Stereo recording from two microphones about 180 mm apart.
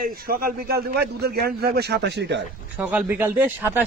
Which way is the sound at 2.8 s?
10° right (ahead or behind).